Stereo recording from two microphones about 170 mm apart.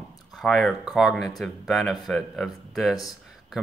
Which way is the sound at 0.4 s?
Centre (ahead or behind).